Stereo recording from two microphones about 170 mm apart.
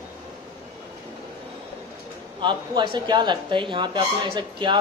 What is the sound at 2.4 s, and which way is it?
Speech, 30° right (ahead or behind).